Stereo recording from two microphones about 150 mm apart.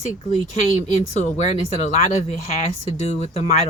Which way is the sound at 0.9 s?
50° left (ahead or behind).